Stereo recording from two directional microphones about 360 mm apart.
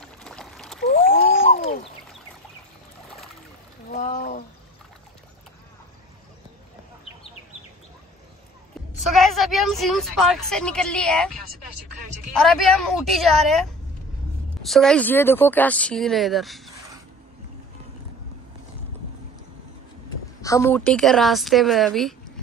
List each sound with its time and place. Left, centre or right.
0.0 s a sound: centre
0.8 s a sound: left
3.9 s speech: left
9.1 s a woman's voice: centre
12.4 s a woman's voice: centre
20.4 s a woman's voice: centre